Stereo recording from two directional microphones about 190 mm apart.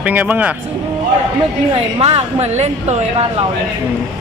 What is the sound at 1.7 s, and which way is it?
A woman's voice, 30° right (ahead or behind).